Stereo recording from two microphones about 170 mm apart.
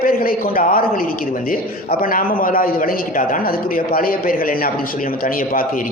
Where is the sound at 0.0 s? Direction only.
60° left (ahead or behind).